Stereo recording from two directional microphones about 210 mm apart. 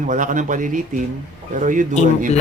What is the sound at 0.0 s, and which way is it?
Speech, 35° right (ahead or behind).